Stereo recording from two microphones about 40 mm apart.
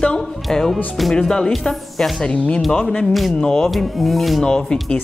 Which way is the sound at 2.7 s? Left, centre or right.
Centre.